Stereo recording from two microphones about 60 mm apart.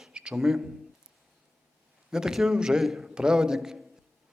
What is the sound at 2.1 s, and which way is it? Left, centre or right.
A man's voice, centre.